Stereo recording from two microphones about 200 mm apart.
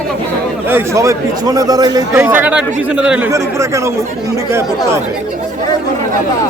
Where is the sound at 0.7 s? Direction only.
15° right (ahead or behind).